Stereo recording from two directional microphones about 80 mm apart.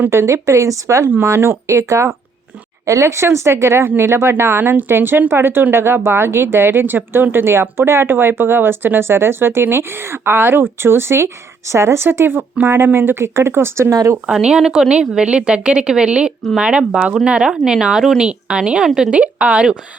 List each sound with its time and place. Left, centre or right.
0.0 s speech: right
14.3 s a woman's voice: centre